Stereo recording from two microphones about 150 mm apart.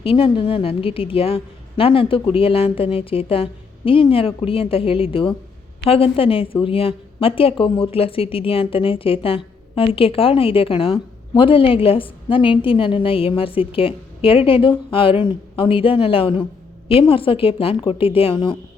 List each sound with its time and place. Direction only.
0.0 s a woman's voice: 35° left (ahead or behind)